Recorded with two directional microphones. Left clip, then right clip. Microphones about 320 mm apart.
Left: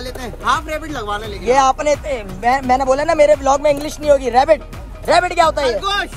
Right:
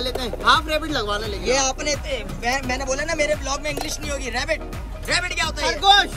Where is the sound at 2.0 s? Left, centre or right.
Left.